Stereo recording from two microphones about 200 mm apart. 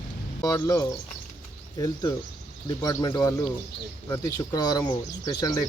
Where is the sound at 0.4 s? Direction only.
15° left (ahead or behind).